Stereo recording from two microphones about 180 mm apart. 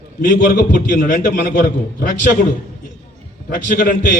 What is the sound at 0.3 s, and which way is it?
A man's voice, 50° left (ahead or behind).